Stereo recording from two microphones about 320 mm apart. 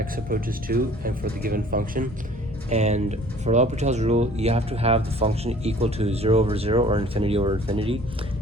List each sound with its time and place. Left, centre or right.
0.0 s speech: right